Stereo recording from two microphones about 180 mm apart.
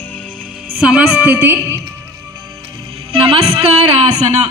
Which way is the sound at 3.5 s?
35° right (ahead or behind).